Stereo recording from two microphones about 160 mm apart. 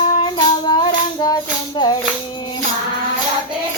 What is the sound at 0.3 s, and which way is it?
Music, 25° left (ahead or behind).